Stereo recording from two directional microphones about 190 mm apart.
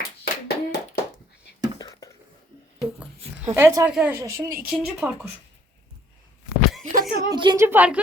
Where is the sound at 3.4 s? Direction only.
15° right (ahead or behind).